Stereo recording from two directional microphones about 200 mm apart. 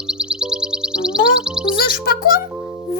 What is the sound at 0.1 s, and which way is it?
Music, 5° right (ahead or behind).